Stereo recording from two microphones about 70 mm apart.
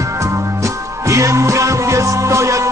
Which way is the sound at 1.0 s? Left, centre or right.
Right.